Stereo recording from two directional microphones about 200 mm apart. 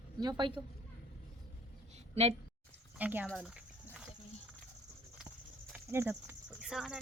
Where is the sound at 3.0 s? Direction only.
10° right (ahead or behind).